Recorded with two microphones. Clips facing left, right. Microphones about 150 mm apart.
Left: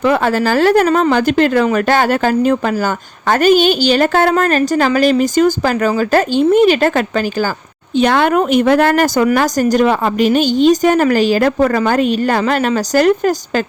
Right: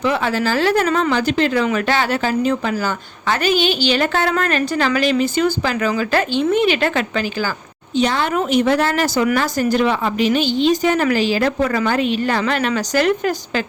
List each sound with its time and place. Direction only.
0.0 s a woman's voice: 50° left (ahead or behind)
1.1 s a woman's voice: 50° left (ahead or behind)
7.9 s a woman's voice: 60° left (ahead or behind); by 13.3 s 40° left (ahead or behind)